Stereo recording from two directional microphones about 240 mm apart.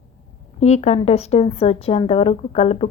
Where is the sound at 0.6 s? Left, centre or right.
Left.